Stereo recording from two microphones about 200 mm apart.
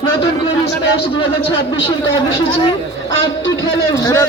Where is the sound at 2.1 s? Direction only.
25° left (ahead or behind).